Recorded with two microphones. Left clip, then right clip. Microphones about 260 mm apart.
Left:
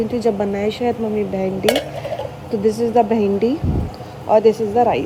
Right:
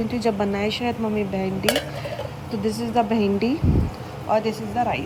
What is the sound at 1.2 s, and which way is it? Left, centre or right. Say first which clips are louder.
Speech: left 5 dB; right.